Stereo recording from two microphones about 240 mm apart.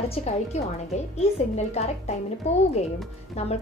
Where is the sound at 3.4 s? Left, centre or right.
Left.